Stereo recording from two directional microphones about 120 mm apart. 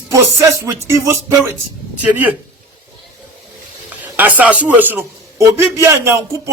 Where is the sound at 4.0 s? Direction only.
15° right (ahead or behind).